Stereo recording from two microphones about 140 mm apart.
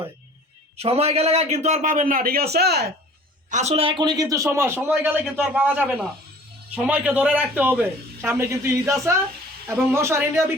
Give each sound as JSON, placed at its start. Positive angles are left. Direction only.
{"t": 0.8, "sound": "a man's voice", "side_deg": -45}
{"t": 3.5, "sound": "a man's voice", "side_deg": -50}